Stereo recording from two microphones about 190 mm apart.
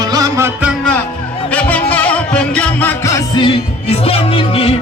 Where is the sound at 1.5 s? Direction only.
10° left (ahead or behind).